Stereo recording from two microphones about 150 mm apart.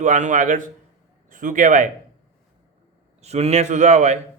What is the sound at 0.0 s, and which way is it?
A man's voice, 55° right (ahead or behind).